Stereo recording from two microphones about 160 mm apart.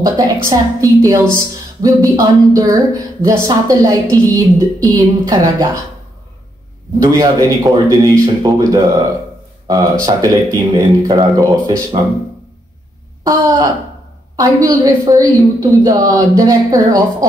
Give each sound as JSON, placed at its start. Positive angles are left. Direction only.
{"t": 0.0, "sound": "music", "side_deg": -20}
{"t": 7.0, "sound": "music", "side_deg": -20}
{"t": 10.0, "sound": "music", "side_deg": -20}
{"t": 13.2, "sound": "speech", "side_deg": -20}
{"t": 14.3, "sound": "music", "side_deg": -25}